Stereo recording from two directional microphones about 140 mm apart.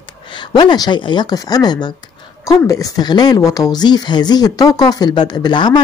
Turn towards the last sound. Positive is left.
turn(degrees=30)  # may be behind; listen again after turning